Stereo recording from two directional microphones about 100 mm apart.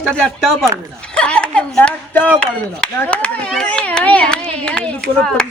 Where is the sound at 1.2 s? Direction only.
10° left (ahead or behind).